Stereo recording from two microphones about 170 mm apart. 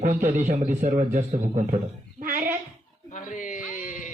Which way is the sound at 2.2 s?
50° right (ahead or behind).